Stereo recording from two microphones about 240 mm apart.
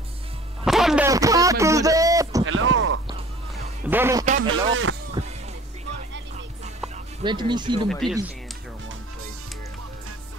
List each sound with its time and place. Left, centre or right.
0.7 s a sound: centre
2.4 s a sound: right
3.8 s music: centre
4.4 s speech: right
5.2 s music: centre
7.2 s speech: centre
7.9 s speech: centre